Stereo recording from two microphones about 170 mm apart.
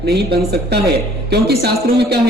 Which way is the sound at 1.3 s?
70° right (ahead or behind).